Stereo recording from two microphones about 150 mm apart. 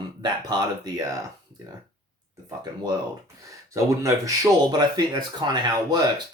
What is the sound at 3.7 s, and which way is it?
Speech, 20° right (ahead or behind).